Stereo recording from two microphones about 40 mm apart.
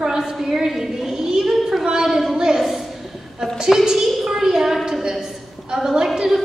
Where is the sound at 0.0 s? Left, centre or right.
Centre.